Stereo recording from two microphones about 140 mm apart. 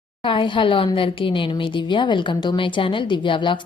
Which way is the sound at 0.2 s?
35° left (ahead or behind).